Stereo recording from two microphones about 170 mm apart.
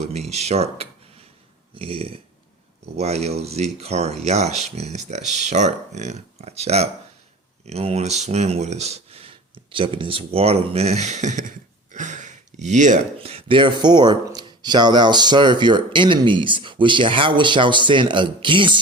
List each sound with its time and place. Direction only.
0.0 s speech: 40° right (ahead or behind)
13.1 s speech: 35° right (ahead or behind)